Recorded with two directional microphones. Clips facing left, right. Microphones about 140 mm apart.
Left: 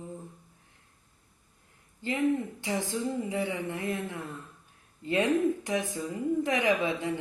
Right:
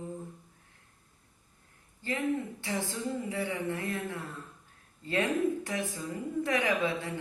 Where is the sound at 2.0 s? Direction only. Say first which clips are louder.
Left 4 dB; 20° left (ahead or behind).